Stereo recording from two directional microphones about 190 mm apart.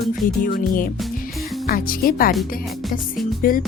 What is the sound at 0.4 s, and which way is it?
Speech, 50° left (ahead or behind).